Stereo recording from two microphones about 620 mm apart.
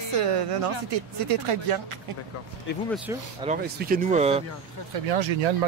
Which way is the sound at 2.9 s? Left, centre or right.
Centre.